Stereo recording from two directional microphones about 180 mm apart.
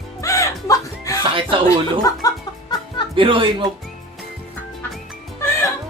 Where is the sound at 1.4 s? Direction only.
30° right (ahead or behind).